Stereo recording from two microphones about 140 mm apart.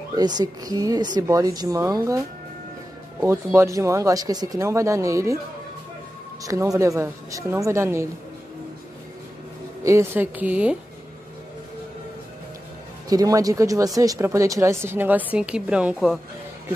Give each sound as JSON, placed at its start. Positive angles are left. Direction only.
{"t": 0.1, "sound": "speech", "side_deg": -30}
{"t": 3.2, "sound": "speech", "side_deg": -20}
{"t": 6.4, "sound": "speech", "side_deg": -25}
{"t": 9.8, "sound": "a woman's voice", "side_deg": -20}
{"t": 13.1, "sound": "speech", "side_deg": -25}